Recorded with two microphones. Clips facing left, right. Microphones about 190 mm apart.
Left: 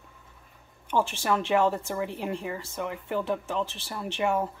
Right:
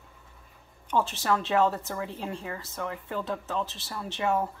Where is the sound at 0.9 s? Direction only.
10° left (ahead or behind).